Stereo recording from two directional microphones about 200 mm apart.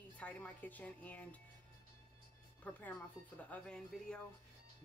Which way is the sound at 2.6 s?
10° left (ahead or behind).